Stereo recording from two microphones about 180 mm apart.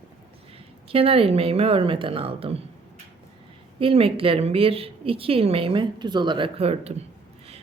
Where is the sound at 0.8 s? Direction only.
30° right (ahead or behind).